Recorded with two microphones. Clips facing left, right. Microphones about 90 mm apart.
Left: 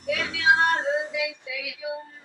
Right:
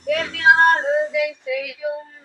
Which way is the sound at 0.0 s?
55° right (ahead or behind).